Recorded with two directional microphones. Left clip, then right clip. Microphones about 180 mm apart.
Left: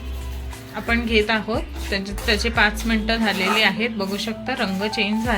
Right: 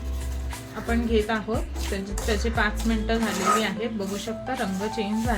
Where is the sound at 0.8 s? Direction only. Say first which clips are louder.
Left 5 dB; 20° left (ahead or behind).